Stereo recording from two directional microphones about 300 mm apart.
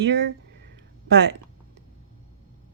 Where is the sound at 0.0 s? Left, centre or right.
Right.